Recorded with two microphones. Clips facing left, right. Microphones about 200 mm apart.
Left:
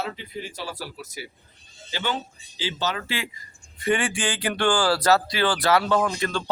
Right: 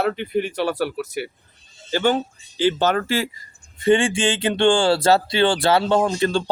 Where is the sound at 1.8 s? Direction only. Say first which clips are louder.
Right 10 dB; 50° right (ahead or behind).